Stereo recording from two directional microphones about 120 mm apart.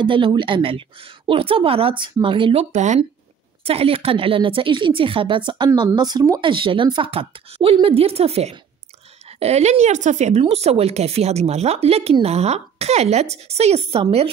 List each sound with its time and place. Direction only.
0.0 s a woman's voice: 40° right (ahead or behind)
2.7 s speech: 80° right
3.6 s a woman's voice: 55° right (ahead or behind); by 10.4 s 75° right (ahead or behind)
10.4 s speech: 60° right (ahead or behind)